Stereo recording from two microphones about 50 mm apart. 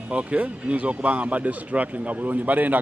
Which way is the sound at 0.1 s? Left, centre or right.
Right.